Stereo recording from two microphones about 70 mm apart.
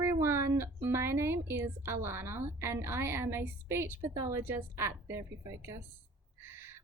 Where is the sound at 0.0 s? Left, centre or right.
Right.